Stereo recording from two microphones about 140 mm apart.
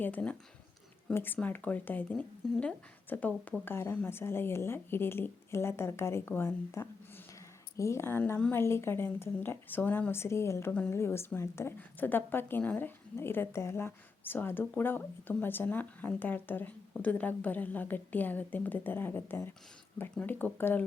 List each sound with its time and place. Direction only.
0.0 s speech: 10° left (ahead or behind)